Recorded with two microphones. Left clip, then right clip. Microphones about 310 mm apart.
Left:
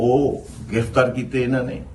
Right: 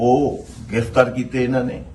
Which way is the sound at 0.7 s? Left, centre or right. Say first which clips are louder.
Right 2 dB; centre.